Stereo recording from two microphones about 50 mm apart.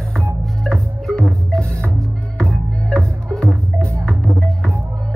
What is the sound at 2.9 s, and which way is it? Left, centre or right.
Music, centre.